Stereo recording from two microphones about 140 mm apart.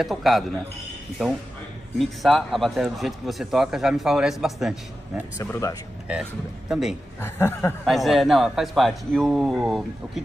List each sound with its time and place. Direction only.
0.0 s speech: centre (ahead or behind)
5.4 s speech: 20° left (ahead or behind)
6.7 s speech: 5° right (ahead or behind)
7.2 s speech: 15° left (ahead or behind)
7.8 s speech: centre (ahead or behind)